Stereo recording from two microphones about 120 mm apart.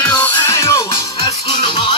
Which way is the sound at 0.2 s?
20° left (ahead or behind).